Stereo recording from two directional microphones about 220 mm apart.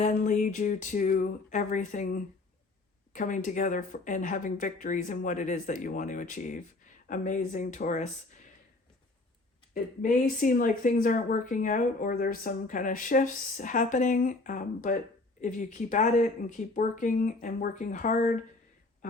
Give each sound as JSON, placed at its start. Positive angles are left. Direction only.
{"t": 0.0, "sound": "speech", "side_deg": 35}
{"t": 10.0, "sound": "speech", "side_deg": 40}